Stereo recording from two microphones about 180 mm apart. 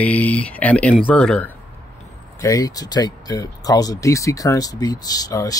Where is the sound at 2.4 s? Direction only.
20° left (ahead or behind).